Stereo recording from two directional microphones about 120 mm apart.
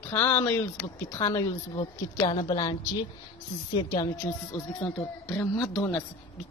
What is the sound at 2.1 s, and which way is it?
Speech, 40° left (ahead or behind).